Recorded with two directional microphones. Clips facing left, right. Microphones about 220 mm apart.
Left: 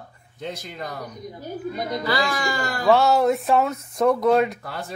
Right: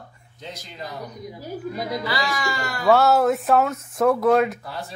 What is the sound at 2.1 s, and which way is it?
Speech, 35° left (ahead or behind).